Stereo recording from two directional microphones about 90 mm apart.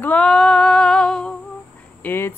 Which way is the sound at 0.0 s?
10° left (ahead or behind).